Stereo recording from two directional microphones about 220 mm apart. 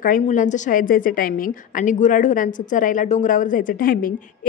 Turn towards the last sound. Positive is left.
turn(degrees=40)  # may be behind; listen again after turning